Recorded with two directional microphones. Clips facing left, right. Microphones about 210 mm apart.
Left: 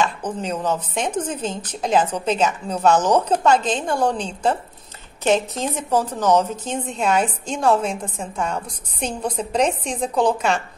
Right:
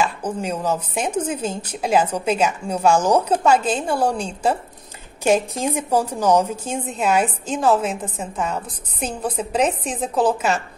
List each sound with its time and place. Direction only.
0.0 s a woman's voice: 10° right (ahead or behind)